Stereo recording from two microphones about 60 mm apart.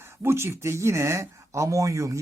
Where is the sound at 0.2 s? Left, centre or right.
Right.